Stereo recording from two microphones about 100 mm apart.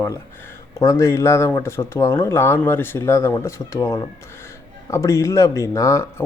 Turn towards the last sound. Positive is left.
turn(degrees=30)  # may be behind; listen again after turning